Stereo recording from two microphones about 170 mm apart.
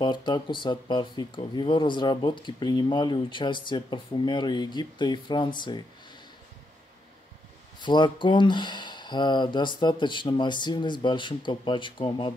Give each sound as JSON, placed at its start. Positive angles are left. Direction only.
{"t": 0.0, "sound": "speech", "side_deg": 25}
{"t": 7.8, "sound": "speech", "side_deg": 25}